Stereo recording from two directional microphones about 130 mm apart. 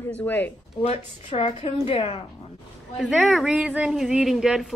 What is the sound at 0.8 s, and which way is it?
A woman's voice, 50° left (ahead or behind).